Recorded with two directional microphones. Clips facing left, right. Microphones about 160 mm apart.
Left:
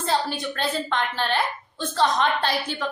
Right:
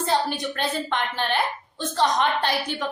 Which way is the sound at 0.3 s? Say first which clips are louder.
Even; 15° right (ahead or behind).